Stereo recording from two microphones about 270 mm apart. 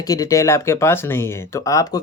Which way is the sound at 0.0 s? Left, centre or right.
Centre.